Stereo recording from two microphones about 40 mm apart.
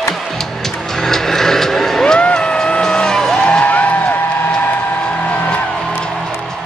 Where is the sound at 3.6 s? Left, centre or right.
Left.